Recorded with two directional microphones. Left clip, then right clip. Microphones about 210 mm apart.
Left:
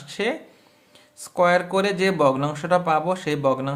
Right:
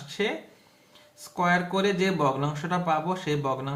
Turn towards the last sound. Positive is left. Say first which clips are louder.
# left 6 dB
turn(degrees=50)  # may be behind; listen again after turning